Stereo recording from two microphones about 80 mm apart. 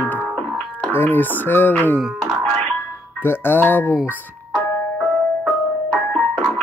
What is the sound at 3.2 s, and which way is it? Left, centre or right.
Speech, left.